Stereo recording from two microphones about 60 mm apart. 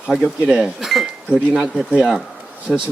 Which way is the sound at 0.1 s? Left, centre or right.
Centre.